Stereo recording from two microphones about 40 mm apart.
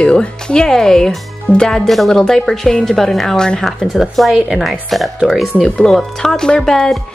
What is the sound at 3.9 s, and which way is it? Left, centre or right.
A woman's voice, centre.